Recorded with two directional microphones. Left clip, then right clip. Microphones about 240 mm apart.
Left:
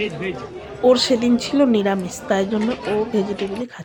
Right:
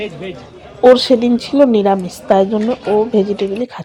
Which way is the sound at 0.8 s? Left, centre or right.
Centre.